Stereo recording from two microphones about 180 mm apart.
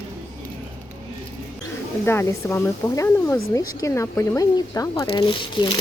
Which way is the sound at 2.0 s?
15° left (ahead or behind).